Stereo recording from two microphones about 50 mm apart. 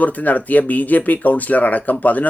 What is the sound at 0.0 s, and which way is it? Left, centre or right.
Speech, left.